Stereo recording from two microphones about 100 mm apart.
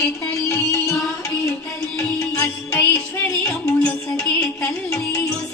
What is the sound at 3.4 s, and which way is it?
Music, 10° left (ahead or behind).